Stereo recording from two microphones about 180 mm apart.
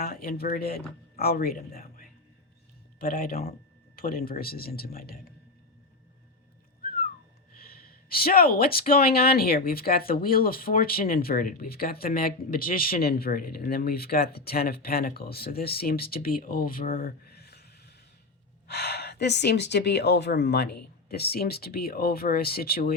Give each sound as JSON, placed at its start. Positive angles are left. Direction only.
{"t": 0.0, "sound": "speech", "side_deg": 55}
{"t": 7.8, "sound": "speech", "side_deg": 55}